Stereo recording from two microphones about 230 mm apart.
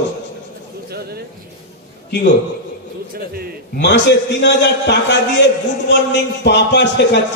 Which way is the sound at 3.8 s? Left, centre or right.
Left.